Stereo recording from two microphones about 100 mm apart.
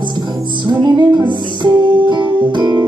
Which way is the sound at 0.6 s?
50° right (ahead or behind).